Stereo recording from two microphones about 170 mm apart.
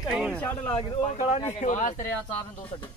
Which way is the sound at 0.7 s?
35° left (ahead or behind).